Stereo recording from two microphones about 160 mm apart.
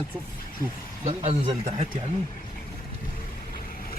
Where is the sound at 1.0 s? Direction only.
40° right (ahead or behind).